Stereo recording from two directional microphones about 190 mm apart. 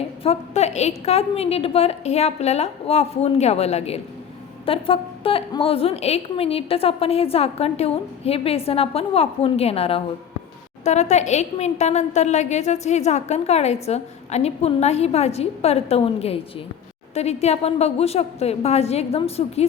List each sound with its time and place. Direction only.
0.2 s a woman's voice: 35° left (ahead or behind)